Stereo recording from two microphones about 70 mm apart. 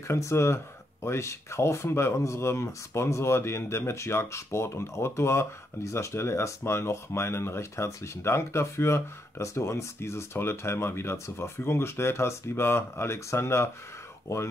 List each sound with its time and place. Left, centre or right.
0.1 s speech: left